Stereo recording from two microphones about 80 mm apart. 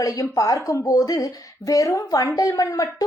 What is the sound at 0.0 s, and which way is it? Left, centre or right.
A woman's voice, left.